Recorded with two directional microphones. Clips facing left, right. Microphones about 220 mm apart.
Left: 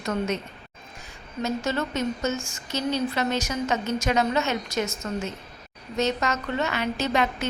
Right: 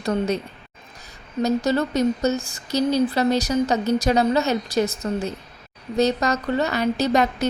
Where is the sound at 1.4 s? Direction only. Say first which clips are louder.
Right 6 dB; 35° right (ahead or behind).